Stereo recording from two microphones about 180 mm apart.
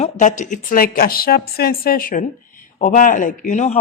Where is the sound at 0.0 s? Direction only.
45° left (ahead or behind).